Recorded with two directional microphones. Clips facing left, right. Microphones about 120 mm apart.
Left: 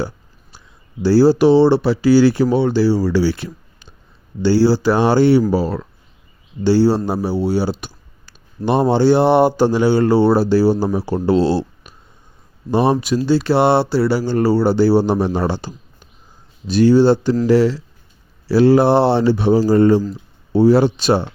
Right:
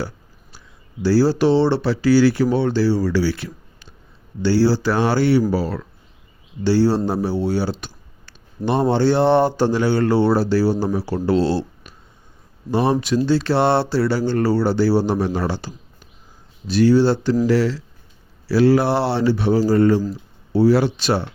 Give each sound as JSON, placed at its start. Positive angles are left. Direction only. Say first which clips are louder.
{"t": 1.0, "sound": "speech", "louder": "left 4 dB", "side_deg": 20}
{"t": 2.6, "sound": "speech", "louder": "left 3 dB", "side_deg": 10}
{"t": 13.2, "sound": "speech", "louder": "left 4 dB", "side_deg": 5}